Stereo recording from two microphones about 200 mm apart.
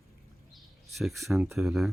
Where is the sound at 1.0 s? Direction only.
Centre (ahead or behind).